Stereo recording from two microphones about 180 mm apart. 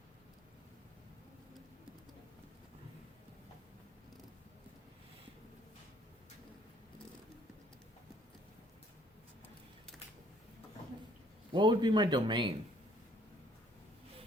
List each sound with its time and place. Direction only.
11.5 s speech: 25° right (ahead or behind)